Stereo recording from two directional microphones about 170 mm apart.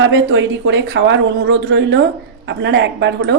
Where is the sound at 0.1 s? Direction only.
90° right.